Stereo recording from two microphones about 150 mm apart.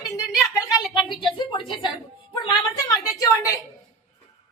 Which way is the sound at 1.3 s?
30° left (ahead or behind).